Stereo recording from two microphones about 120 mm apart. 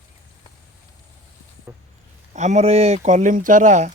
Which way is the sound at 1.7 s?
20° right (ahead or behind).